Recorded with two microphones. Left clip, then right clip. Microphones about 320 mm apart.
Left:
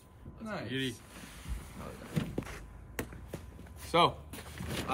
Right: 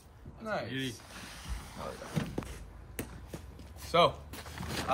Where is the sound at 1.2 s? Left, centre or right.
Centre.